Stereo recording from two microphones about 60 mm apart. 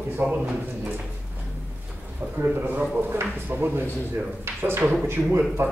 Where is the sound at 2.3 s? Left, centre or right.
Right.